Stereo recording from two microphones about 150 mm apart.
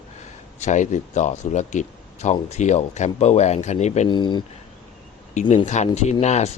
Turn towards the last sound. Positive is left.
turn(degrees=50)  # may be behind; listen again after turning